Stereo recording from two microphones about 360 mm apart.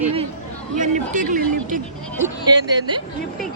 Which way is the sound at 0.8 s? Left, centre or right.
Right.